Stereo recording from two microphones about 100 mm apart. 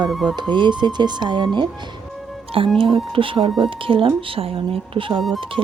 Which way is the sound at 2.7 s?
60° right (ahead or behind).